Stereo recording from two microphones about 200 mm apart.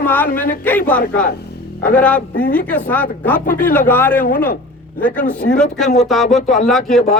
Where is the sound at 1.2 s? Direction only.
50° left (ahead or behind).